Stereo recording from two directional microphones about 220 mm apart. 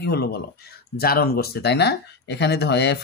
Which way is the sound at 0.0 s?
45° left (ahead or behind).